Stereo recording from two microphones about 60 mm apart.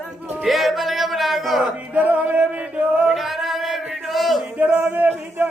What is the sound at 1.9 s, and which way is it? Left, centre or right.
Music, right.